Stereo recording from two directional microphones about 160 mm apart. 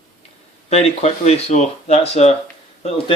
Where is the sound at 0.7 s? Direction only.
40° left (ahead or behind).